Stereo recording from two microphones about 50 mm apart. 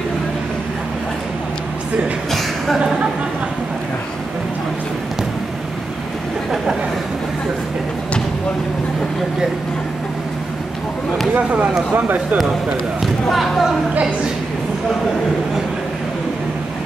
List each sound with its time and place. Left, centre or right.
11.3 s speech: right
11.9 s speech: right
13.0 s speech: centre